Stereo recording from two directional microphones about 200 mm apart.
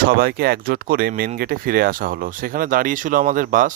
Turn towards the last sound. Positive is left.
turn(degrees=-45)  # may be behind; listen again after turning